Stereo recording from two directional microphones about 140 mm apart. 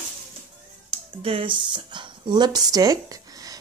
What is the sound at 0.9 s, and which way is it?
Speech, 45° right (ahead or behind).